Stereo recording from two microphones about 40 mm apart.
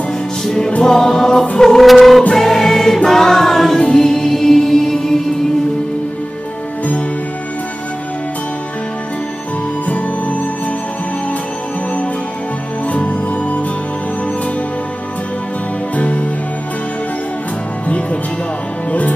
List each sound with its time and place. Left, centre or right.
0.8 s music: centre
1.9 s music: centre
9.8 s music: left
12.9 s music: left
16.0 s music: left
18.9 s music: left